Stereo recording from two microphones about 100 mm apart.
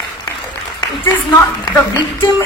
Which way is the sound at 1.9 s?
35° left (ahead or behind).